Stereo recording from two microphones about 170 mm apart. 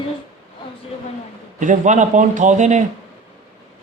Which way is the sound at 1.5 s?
45° right (ahead or behind).